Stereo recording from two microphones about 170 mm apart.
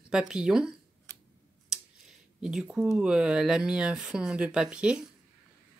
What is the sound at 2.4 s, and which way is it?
Speech, 5° right (ahead or behind).